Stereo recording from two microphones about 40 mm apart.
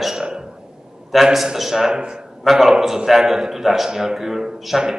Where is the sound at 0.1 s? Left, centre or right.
Centre.